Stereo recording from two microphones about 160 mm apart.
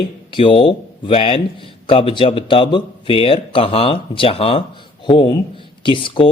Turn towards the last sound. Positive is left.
turn(degrees=35)  # may be behind; listen again after turning